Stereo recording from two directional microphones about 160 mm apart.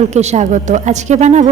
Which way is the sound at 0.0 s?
45° right (ahead or behind).